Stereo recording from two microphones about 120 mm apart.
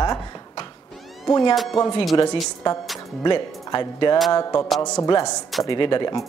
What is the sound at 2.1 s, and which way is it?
Speech, 40° left (ahead or behind).